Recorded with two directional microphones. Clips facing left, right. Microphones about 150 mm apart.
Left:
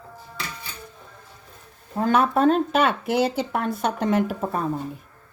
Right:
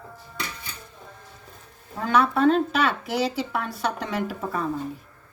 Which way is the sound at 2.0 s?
45° left (ahead or behind).